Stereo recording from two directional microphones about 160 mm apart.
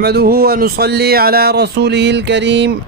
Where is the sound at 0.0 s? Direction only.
85° right.